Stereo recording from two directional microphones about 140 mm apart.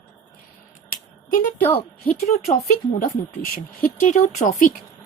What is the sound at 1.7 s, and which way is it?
Speech, 90° left.